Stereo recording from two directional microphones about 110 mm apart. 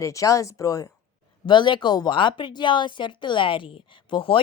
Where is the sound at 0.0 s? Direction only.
30° left (ahead or behind).